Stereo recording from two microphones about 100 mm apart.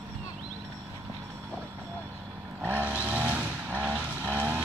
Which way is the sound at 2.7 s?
15° right (ahead or behind).